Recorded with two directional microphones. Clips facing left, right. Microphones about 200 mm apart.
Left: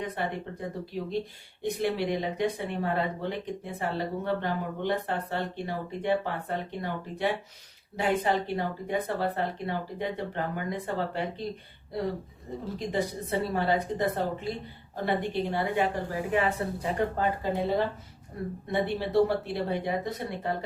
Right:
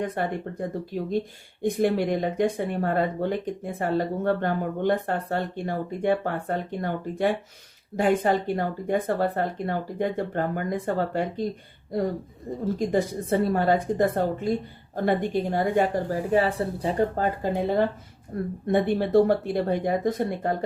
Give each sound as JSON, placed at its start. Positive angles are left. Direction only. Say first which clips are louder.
{"t": 0.2, "sound": "speech", "louder": "right 5 dB", "side_deg": -50}
{"t": 12.9, "sound": "a woman's voice", "louder": "right 3 dB", "side_deg": -50}